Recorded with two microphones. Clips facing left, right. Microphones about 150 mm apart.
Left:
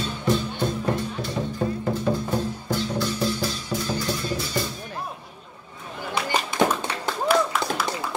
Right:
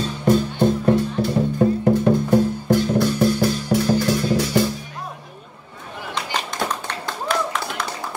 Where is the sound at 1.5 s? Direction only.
60° right (ahead or behind).